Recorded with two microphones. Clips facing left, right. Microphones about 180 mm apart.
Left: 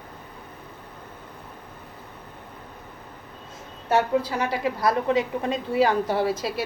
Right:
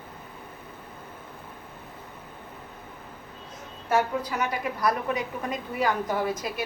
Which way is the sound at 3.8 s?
30° left (ahead or behind).